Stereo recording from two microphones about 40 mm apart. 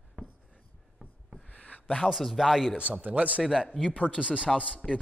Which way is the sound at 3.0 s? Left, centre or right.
Right.